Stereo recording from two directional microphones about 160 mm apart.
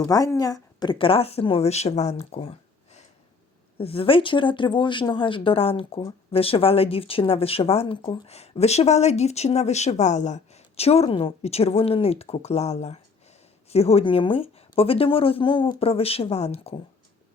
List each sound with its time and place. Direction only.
0.0 s speech: 20° left (ahead or behind); by 16.7 s 40° left (ahead or behind)